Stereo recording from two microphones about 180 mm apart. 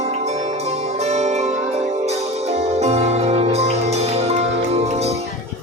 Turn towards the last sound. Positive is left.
turn(degrees=-35)  # may be behind; listen again after turning